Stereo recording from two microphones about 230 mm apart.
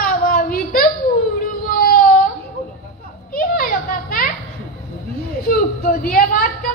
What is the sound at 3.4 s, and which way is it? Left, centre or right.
Children playing, left.